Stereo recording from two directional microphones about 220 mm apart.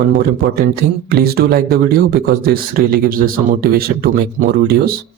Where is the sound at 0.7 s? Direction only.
45° right (ahead or behind).